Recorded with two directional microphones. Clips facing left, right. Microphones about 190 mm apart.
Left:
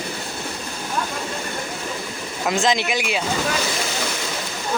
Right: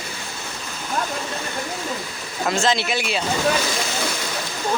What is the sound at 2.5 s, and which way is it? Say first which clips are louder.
Speech: left 1 dB; 15° left (ahead or behind).